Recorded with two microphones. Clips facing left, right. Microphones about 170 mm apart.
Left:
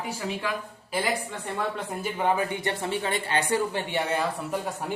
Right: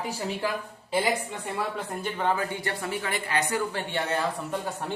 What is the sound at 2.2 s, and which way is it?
Speech, 15° left (ahead or behind).